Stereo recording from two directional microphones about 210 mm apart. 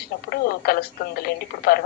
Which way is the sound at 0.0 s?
45° left (ahead or behind).